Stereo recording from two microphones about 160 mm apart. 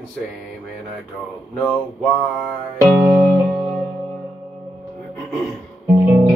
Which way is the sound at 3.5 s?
Centre (ahead or behind).